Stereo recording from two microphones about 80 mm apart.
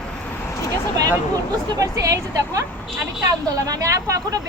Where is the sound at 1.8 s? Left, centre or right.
Right.